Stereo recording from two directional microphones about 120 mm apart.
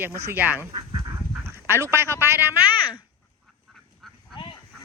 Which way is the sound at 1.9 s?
20° right (ahead or behind).